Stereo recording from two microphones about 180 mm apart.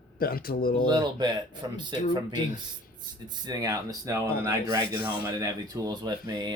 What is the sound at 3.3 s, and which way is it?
Speech, 20° right (ahead or behind).